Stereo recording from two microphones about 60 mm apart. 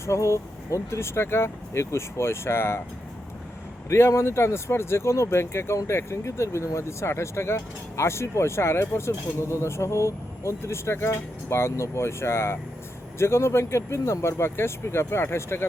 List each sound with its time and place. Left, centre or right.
0.0 s speech: left
3.8 s speech: left